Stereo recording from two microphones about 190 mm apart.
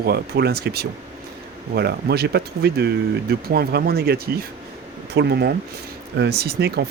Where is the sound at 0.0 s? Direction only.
55° right (ahead or behind).